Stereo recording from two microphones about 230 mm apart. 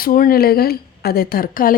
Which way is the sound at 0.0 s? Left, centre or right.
Left.